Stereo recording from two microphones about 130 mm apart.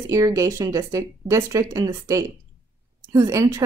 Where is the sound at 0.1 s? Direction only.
25° right (ahead or behind).